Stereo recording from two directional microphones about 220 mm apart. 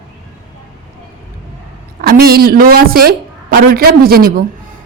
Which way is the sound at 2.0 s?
45° right (ahead or behind).